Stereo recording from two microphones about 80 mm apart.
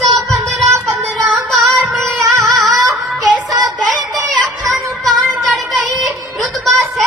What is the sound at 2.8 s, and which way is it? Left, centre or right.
Child singing, right.